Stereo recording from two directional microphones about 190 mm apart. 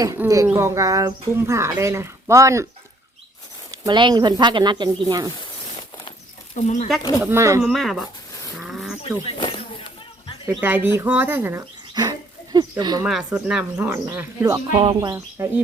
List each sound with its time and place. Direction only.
0.0 s speech: 15° right (ahead or behind)
3.8 s speech: 25° right (ahead or behind)
6.6 s speech: 40° left (ahead or behind)
7.2 s speech: 15° right (ahead or behind)
7.6 s speech: centre (ahead or behind)
8.5 s a sound: centre (ahead or behind)
9.2 s a sound: 25° left (ahead or behind)
10.4 s speech: 10° right (ahead or behind)
11.9 s a sound: 20° right (ahead or behind)
13.1 s speech: 5° right (ahead or behind)
14.8 s speech: 30° right (ahead or behind)
15.4 s speech: 10° right (ahead or behind)